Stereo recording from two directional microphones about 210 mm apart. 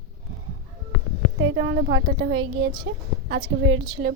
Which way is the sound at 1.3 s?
55° right (ahead or behind).